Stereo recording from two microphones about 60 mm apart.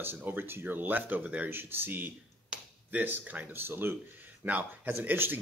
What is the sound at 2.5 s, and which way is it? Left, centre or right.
Finger snapping, right.